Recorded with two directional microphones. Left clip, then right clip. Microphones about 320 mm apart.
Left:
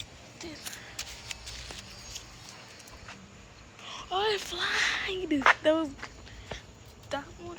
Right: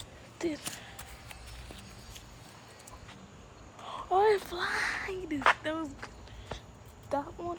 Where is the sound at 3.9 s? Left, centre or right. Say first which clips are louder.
Right 4 dB; centre.